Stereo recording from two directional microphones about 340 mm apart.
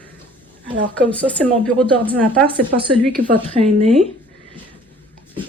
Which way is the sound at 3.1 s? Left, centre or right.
Right.